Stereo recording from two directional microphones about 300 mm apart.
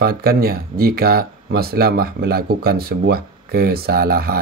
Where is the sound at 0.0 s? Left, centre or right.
Right.